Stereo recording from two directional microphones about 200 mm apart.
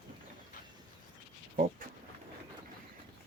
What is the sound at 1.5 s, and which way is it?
Speech, 45° right (ahead or behind).